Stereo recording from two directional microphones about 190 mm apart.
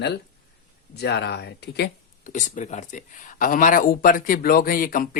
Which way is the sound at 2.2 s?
40° left (ahead or behind).